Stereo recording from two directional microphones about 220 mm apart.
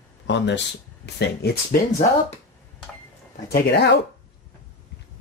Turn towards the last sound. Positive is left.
turn(degrees=50)  # may be behind; listen again after turning